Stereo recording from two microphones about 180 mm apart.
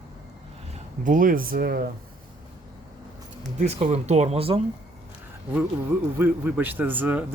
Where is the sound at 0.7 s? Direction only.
45° right (ahead or behind).